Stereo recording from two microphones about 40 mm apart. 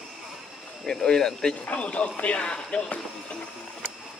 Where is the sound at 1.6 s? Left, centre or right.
Left.